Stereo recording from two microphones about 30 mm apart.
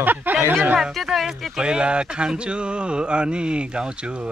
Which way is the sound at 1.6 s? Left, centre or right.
Right.